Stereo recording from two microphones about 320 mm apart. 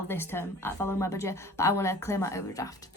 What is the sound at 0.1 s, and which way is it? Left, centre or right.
A woman's voice, centre.